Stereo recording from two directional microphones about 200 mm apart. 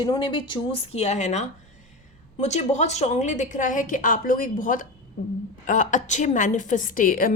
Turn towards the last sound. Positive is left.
turn(degrees=45)  # may be behind; listen again after turning